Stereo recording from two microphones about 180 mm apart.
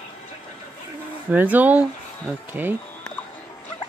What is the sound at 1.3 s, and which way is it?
Speech, 10° right (ahead or behind).